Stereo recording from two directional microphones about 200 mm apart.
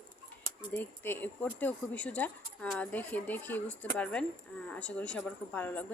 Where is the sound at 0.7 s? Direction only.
10° left (ahead or behind).